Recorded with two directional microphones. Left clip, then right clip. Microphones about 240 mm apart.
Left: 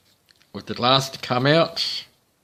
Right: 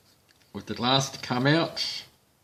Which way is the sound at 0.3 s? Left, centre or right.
Left.